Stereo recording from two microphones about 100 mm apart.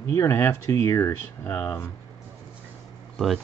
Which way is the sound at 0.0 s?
25° left (ahead or behind).